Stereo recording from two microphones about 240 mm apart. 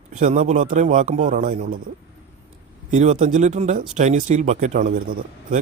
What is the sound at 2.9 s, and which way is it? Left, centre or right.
A man's voice, right.